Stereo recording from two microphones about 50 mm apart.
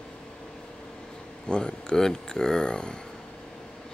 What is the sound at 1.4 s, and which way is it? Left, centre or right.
Speech, centre.